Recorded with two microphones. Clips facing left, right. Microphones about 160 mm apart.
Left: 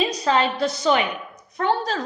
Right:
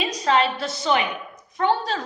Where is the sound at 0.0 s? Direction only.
35° left (ahead or behind).